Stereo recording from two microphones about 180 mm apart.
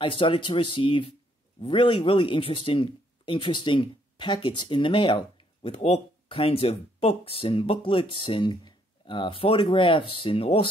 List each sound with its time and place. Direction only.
0.0 s speech: 30° left (ahead or behind)